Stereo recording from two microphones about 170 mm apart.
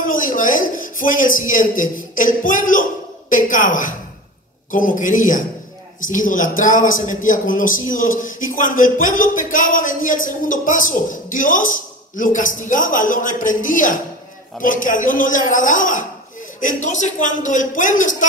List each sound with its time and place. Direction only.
0.0 s a man's voice: 55° left (ahead or behind)